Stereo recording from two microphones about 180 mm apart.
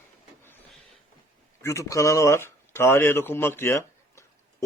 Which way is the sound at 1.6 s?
15° left (ahead or behind).